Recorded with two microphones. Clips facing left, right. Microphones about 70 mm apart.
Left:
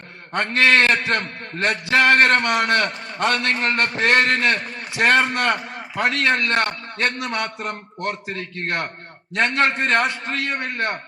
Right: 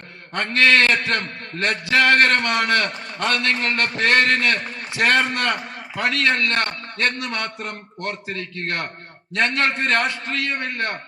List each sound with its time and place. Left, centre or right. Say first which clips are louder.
0.3 s a man's voice: even; left